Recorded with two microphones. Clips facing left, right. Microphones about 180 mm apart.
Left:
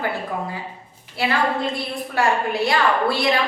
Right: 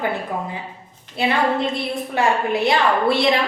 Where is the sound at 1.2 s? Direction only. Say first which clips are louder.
Right 2 dB; 20° right (ahead or behind).